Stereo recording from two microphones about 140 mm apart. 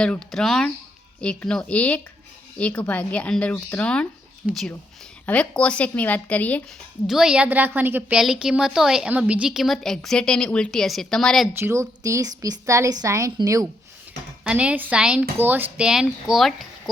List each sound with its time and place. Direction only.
0.0 s a woman's voice: 5° left (ahead or behind)
7.1 s a woman's voice: 5° right (ahead or behind)
11.6 s a woman's voice: 20° right (ahead or behind)
14.4 s speech: 10° right (ahead or behind)